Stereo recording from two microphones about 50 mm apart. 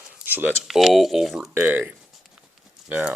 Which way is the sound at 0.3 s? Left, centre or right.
Right.